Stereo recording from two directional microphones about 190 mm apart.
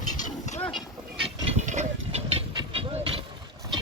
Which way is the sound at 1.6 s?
35° right (ahead or behind).